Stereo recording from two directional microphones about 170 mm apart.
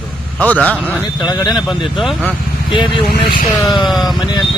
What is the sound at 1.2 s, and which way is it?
Speech, 25° left (ahead or behind).